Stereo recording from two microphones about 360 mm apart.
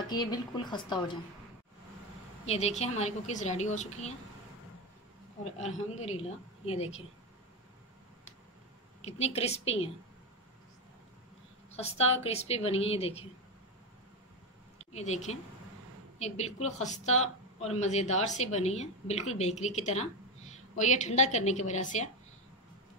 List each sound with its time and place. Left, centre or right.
0.1 s a woman's voice: centre
2.4 s a woman's voice: centre
5.4 s a woman's voice: centre
9.0 s a woman's voice: centre
11.7 s a woman's voice: centre
14.9 s a woman's voice: centre